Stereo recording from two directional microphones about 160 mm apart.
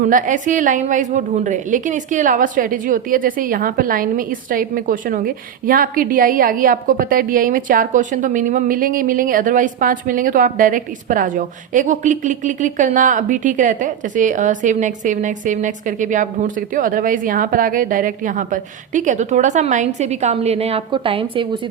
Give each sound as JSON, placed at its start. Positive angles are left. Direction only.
{"t": 0.0, "sound": "a woman's voice", "side_deg": -55}